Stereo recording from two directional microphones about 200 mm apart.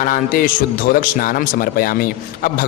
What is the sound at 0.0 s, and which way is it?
A man's voice, 45° left (ahead or behind).